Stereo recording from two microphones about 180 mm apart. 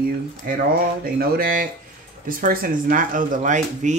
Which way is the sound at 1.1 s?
50° right (ahead or behind).